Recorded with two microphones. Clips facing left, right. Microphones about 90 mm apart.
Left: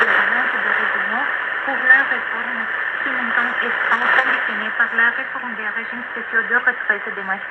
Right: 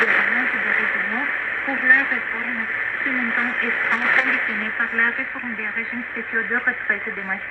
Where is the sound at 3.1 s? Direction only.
45° left (ahead or behind).